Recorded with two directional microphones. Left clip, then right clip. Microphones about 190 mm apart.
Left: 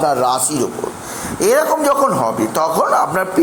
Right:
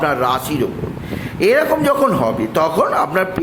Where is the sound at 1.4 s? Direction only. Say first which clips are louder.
Even; 25° right (ahead or behind).